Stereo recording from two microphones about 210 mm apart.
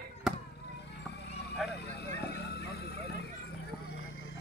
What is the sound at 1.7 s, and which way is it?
Vehicle, 50° left (ahead or behind).